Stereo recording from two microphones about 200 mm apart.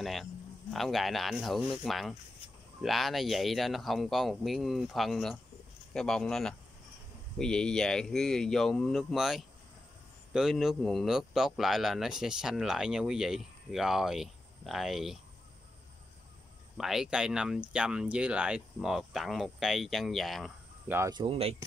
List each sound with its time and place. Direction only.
0.0 s speech: centre (ahead or behind)
16.7 s speech: centre (ahead or behind)
20.9 s speech: 15° right (ahead or behind)